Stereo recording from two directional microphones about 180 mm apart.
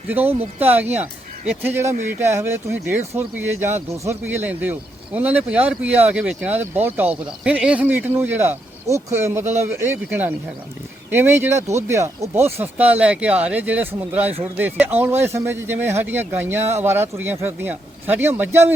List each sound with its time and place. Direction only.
0.1 s speech: 10° right (ahead or behind)